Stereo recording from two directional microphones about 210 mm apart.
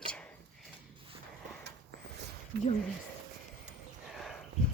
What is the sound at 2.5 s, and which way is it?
Speech, 50° right (ahead or behind).